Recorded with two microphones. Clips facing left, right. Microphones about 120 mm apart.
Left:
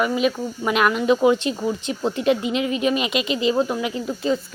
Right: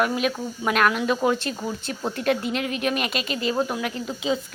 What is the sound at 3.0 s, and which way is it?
Speech, 50° right (ahead or behind).